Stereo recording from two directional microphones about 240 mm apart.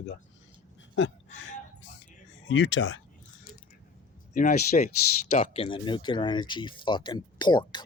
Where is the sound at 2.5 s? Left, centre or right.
Left.